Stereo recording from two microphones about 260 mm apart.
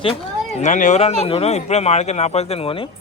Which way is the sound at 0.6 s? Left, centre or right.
Left.